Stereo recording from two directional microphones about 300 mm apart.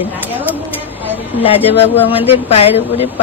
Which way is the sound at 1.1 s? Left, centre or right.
Centre.